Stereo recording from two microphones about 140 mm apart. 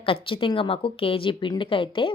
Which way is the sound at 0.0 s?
40° left (ahead or behind).